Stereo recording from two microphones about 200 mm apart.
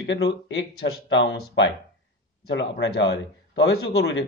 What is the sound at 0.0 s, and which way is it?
Speech, 60° left (ahead or behind).